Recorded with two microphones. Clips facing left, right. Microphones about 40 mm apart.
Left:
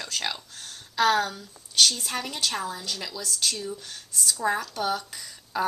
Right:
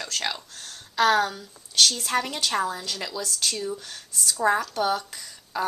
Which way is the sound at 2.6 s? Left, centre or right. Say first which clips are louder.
Right 3 dB; centre.